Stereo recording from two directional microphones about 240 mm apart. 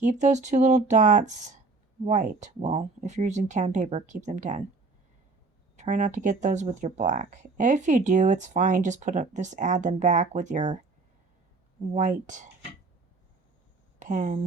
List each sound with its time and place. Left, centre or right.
0.0 s speech: right
5.7 s speech: right
14.0 s speech: right